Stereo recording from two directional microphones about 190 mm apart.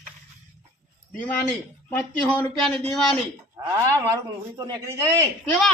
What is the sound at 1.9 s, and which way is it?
Speech, 10° left (ahead or behind).